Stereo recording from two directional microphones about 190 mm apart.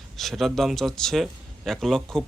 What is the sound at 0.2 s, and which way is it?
Speech, centre (ahead or behind).